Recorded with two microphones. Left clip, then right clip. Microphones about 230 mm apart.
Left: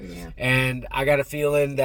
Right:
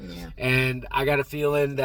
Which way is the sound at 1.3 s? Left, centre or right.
Left.